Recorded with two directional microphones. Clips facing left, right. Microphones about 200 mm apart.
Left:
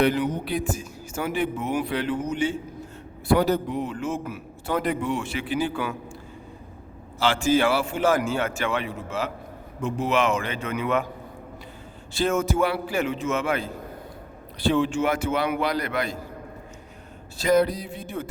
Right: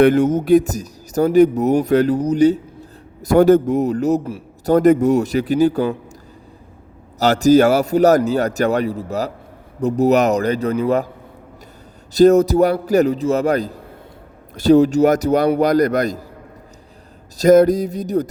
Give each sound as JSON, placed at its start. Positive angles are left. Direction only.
{"t": 0.0, "sound": "a man's voice", "side_deg": -50}
{"t": 7.2, "sound": "a man's voice", "side_deg": -40}
{"t": 12.1, "sound": "a man's voice", "side_deg": -40}
{"t": 17.3, "sound": "a man's voice", "side_deg": -45}